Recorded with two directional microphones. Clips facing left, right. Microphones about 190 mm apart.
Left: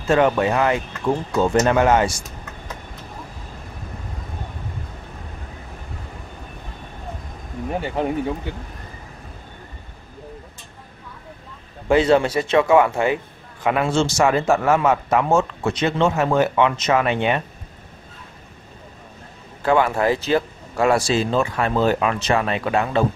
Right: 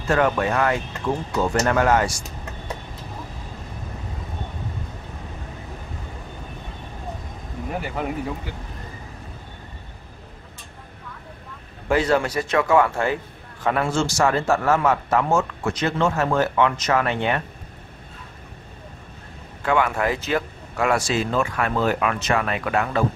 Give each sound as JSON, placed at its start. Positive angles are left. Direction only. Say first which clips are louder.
{"t": 0.1, "sound": "speech", "louder": "left 3 dB", "side_deg": 20}
{"t": 7.8, "sound": "speech", "louder": "left 6 dB", "side_deg": 30}
{"t": 11.9, "sound": "speech", "louder": "left 4 dB", "side_deg": 25}
{"t": 19.6, "sound": "speech", "louder": "left 3 dB", "side_deg": 30}